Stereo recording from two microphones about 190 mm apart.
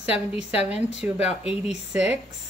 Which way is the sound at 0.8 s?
10° right (ahead or behind).